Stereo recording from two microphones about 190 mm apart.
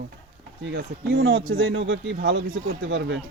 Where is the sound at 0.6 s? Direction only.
65° right (ahead or behind).